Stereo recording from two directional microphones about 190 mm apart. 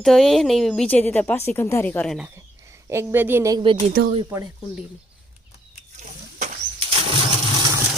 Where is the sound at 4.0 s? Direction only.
50° right (ahead or behind).